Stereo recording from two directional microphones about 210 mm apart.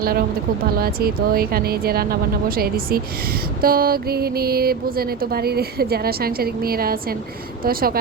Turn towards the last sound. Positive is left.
turn(degrees=-45)  # may be behind; listen again after turning